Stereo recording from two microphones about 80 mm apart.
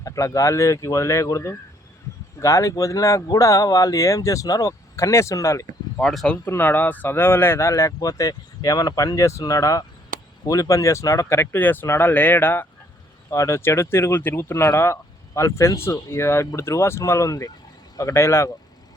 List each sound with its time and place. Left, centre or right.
0.0 s speech: left
6.0 s speech: centre
6.3 s speech: left
13.3 s speech: left
13.6 s speech: left